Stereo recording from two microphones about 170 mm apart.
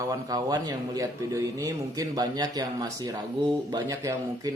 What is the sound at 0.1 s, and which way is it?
Speech, 20° right (ahead or behind).